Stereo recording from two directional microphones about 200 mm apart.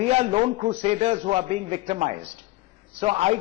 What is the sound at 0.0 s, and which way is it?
A man's voice, 30° right (ahead or behind).